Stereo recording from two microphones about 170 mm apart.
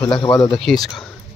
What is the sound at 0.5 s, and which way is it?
Speech, centre (ahead or behind).